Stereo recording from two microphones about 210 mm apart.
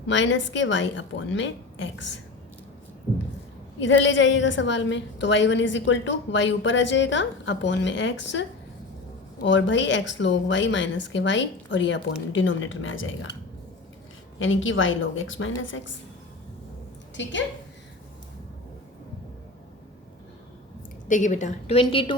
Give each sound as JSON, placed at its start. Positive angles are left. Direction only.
{"t": 0.1, "sound": "a woman's voice", "side_deg": 60}
{"t": 3.8, "sound": "a woman's voice", "side_deg": 60}
{"t": 14.3, "sound": "a woman's voice", "side_deg": 65}
{"t": 17.2, "sound": "a woman's voice", "side_deg": 60}
{"t": 21.1, "sound": "a woman's voice", "side_deg": 35}